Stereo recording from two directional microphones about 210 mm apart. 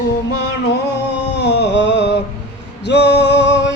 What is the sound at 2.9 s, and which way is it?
Male singing, 55° left (ahead or behind).